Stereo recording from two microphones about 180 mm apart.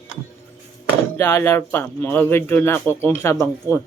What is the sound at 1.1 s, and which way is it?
A man's voice, 15° left (ahead or behind).